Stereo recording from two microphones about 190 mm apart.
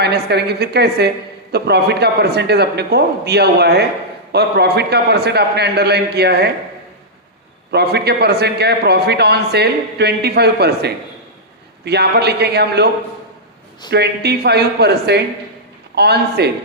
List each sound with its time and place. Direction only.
0.0 s a man's voice: 60° right (ahead or behind)
7.7 s a man's voice: 60° right (ahead or behind)
13.9 s a man's voice: 60° right (ahead or behind)